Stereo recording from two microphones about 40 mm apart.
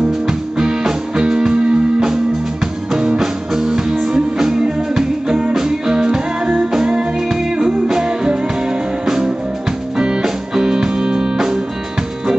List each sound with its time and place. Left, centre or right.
0.3 s music: centre